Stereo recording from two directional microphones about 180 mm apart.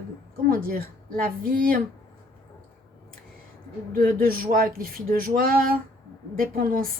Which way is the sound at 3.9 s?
50° right (ahead or behind).